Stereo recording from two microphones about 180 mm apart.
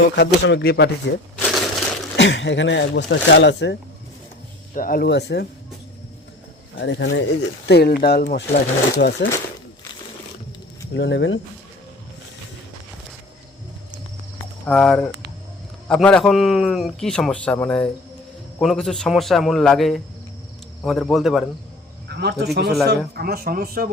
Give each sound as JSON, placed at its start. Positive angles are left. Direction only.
{"t": 0.2, "sound": "speech", "side_deg": 70}
{"t": 1.4, "sound": "crushing", "side_deg": 0}
{"t": 2.1, "sound": "speech", "side_deg": 80}
{"t": 4.7, "sound": "speech", "side_deg": 50}
{"t": 6.7, "sound": "speech", "side_deg": 80}
{"t": 7.7, "sound": "speech", "side_deg": 60}
{"t": 10.9, "sound": "speech", "side_deg": 75}
{"t": 14.7, "sound": "a man's voice", "side_deg": 5}
{"t": 22.1, "sound": "speech", "side_deg": -65}